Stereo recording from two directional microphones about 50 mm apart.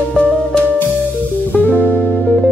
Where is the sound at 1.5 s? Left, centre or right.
Left.